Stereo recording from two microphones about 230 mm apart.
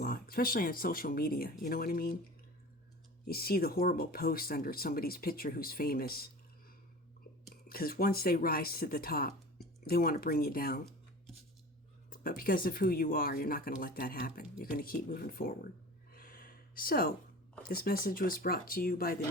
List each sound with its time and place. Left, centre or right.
0.0 s speech: left
3.2 s speech: left
7.5 s speech: left
12.1 s speech: left
16.1 s a sound: left
17.7 s speech: left